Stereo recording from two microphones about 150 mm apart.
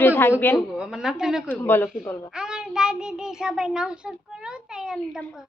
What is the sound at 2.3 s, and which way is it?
Child singing, 5° right (ahead or behind).